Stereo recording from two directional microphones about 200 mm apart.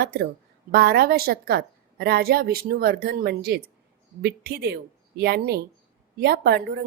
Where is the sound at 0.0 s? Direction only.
50° right (ahead or behind).